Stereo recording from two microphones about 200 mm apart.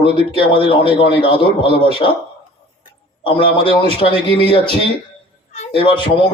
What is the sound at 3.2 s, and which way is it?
Speech, 25° left (ahead or behind).